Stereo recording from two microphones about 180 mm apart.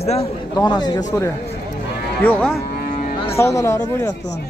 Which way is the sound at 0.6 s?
20° left (ahead or behind).